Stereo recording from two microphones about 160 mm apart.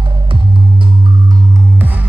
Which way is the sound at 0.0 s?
35° right (ahead or behind).